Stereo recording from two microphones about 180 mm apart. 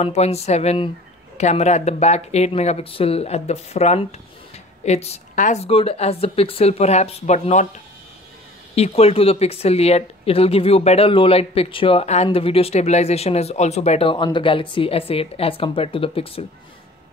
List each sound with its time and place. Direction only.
0.0 s speech: 35° left (ahead or behind)
8.7 s speech: 35° left (ahead or behind)